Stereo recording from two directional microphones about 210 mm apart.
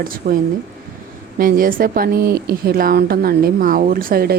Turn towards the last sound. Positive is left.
turn(degrees=-45)  # may be behind; listen again after turning